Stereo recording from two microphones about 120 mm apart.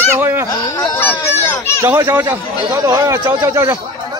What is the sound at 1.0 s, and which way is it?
Speech, 20° left (ahead or behind).